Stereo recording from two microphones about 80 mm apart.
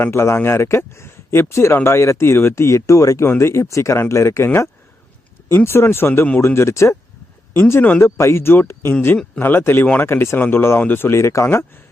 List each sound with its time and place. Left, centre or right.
0.1 s speech: left
8.0 s speech: left